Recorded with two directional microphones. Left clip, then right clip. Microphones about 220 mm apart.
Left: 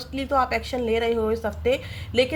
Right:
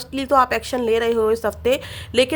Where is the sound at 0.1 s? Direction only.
40° right (ahead or behind).